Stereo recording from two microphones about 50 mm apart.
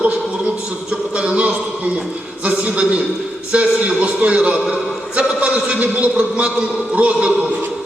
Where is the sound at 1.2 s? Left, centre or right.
Right.